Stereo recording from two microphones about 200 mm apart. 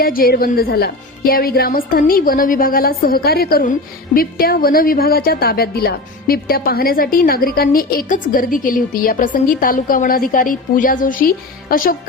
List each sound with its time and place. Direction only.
0.0 s a woman's voice: 45° left (ahead or behind)